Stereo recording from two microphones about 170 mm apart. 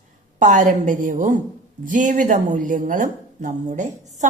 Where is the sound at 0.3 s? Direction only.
50° right (ahead or behind).